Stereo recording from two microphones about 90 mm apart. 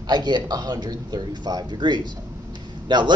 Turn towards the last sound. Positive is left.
turn(degrees=-55)  # may be behind; listen again after turning